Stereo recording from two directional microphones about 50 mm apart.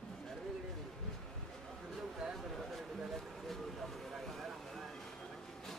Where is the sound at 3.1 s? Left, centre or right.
Centre.